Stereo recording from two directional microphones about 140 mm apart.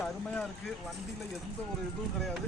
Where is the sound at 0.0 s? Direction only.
10° left (ahead or behind).